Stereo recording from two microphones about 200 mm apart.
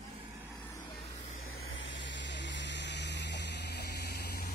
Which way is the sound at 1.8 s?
65° left (ahead or behind).